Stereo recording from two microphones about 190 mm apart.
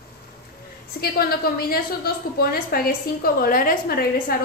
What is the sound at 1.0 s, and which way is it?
A woman's voice, 55° left (ahead or behind).